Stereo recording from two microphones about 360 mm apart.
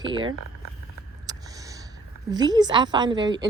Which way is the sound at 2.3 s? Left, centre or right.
Centre.